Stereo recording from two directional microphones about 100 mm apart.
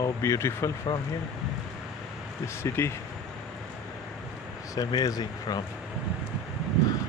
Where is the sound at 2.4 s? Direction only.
25° left (ahead or behind).